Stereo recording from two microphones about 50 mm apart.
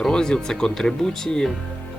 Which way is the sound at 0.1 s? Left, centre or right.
Centre.